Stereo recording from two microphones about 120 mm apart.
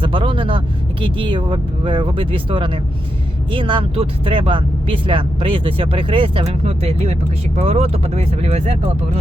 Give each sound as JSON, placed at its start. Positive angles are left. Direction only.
{"t": 0.0, "sound": "speech", "side_deg": -45}